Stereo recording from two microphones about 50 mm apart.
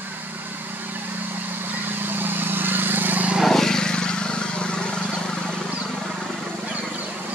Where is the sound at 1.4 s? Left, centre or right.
Right.